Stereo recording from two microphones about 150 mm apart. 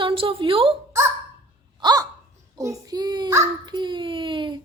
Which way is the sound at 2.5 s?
25° right (ahead or behind).